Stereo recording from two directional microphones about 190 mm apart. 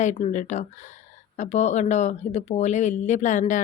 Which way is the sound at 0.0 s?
40° left (ahead or behind).